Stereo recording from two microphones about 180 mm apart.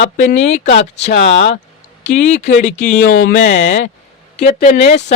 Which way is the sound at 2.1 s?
40° left (ahead or behind).